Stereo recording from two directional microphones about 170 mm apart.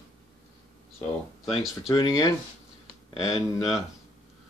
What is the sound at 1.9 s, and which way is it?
Speech, 20° left (ahead or behind).